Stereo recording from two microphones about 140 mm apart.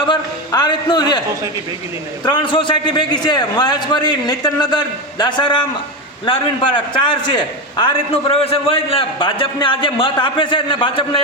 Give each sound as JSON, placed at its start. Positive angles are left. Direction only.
{"t": 0.0, "sound": "a man's voice", "side_deg": 35}
{"t": 2.2, "sound": "a man's voice", "side_deg": 35}